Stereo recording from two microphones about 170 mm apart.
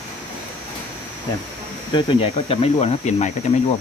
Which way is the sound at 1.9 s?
30° left (ahead or behind).